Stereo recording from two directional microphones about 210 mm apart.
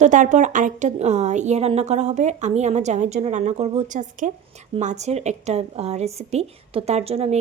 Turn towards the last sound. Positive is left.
turn(degrees=-30)  # may be behind; listen again after turning